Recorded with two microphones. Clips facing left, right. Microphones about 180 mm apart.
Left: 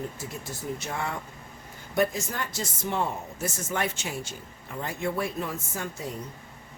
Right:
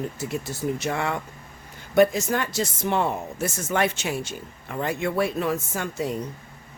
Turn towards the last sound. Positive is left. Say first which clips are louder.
# right 6 dB
turn(degrees=-75)  # may be behind; listen again after turning